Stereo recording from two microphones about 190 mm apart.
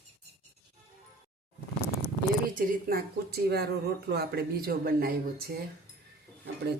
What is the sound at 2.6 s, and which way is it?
Speech, 50° right (ahead or behind).